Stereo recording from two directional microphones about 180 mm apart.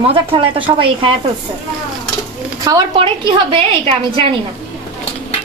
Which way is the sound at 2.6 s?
20° right (ahead or behind).